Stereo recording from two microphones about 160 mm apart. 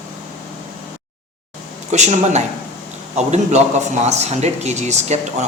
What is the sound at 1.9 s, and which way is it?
Speech, 45° right (ahead or behind).